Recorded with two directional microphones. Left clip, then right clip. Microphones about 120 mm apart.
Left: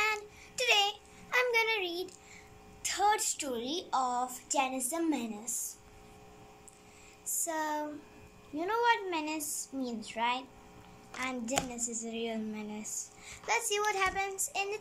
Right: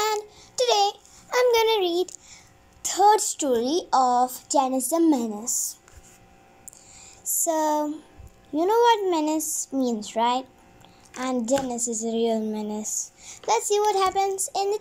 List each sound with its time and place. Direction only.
0.6 s a sound: 50° right (ahead or behind)
7.4 s speech: 60° right (ahead or behind)
11.1 s a woman's voice: 55° right (ahead or behind)